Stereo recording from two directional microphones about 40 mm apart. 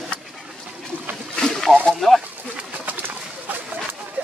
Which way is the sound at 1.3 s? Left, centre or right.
Centre.